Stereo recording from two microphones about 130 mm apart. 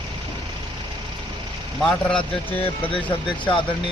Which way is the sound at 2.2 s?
40° left (ahead or behind).